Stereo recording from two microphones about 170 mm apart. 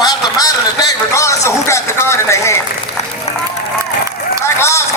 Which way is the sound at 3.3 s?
40° left (ahead or behind).